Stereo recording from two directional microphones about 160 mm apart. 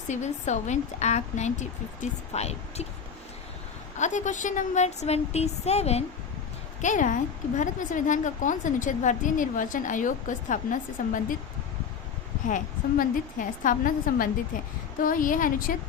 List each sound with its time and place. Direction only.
0.1 s a woman's voice: 50° left (ahead or behind)
3.9 s a woman's voice: 50° left (ahead or behind)
6.8 s a woman's voice: 50° left (ahead or behind)
12.5 s a woman's voice: 55° left (ahead or behind)